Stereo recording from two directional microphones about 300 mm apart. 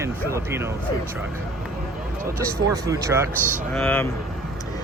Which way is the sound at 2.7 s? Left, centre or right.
Centre.